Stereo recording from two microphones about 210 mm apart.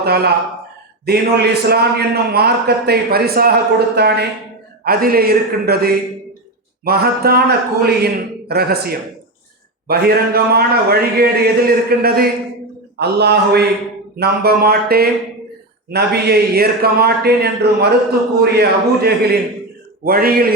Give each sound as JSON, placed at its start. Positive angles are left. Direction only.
{"t": 0.0, "sound": "a man's voice", "side_deg": -50}